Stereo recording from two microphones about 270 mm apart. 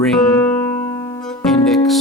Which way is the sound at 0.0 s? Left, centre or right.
Centre.